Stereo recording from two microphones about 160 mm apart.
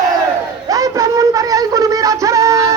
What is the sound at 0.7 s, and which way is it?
Music, 20° right (ahead or behind).